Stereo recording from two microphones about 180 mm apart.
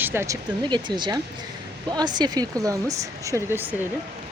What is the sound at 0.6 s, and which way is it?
Speech, 25° right (ahead or behind).